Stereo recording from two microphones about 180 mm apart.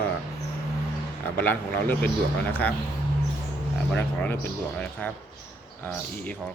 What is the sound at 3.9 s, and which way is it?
Speech, 10° left (ahead or behind).